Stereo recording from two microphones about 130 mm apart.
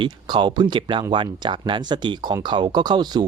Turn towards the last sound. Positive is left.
turn(degrees=-30)  # may be behind; listen again after turning